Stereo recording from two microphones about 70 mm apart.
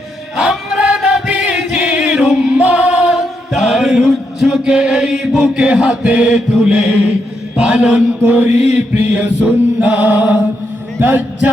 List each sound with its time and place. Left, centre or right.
0.3 s music: centre
0.9 s chant: centre
1.3 s music: centre
3.5 s chant: centre
8.2 s music: right
8.5 s mantra: centre
8.9 s music: right
11.0 s a sound: right